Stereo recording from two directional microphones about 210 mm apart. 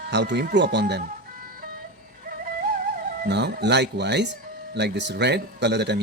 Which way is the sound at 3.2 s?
55° right (ahead or behind).